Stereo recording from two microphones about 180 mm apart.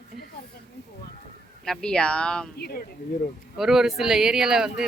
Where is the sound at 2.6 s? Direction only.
60° left (ahead or behind).